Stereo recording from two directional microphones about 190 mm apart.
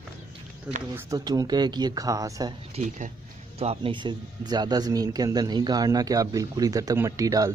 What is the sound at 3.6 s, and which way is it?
A man's voice, 30° right (ahead or behind).